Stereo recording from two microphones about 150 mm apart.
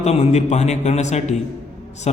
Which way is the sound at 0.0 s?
45° left (ahead or behind).